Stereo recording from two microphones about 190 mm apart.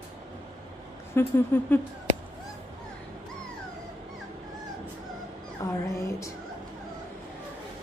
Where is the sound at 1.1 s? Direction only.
10° left (ahead or behind).